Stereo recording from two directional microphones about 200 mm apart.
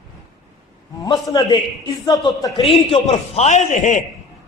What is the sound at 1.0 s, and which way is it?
A man's voice, 20° left (ahead or behind).